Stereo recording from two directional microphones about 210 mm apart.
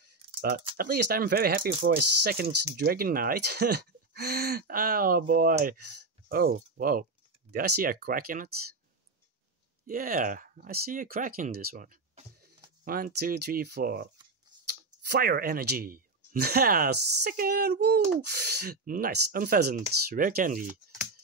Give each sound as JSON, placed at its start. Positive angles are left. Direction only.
{"t": 0.7, "sound": "speech", "side_deg": -50}
{"t": 9.8, "sound": "speech", "side_deg": -40}